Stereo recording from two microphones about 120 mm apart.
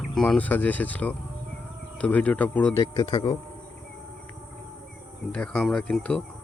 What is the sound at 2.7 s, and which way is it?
Speech, 35° left (ahead or behind).